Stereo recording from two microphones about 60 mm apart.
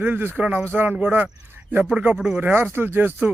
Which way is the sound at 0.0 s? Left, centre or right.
Right.